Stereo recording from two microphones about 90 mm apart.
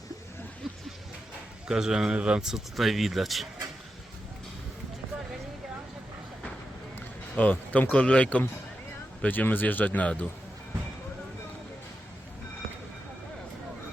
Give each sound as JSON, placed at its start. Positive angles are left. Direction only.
{"t": 0.6, "sound": "a sound", "side_deg": 0}
{"t": 1.6, "sound": "speech", "side_deg": -5}
{"t": 2.7, "sound": "speech", "side_deg": 0}
{"t": 7.3, "sound": "speech", "side_deg": 15}